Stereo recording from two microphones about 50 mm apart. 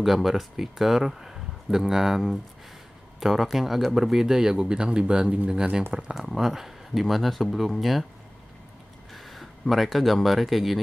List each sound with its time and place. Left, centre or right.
0.0 s speech: centre
6.2 s speech: centre
9.1 s speech: centre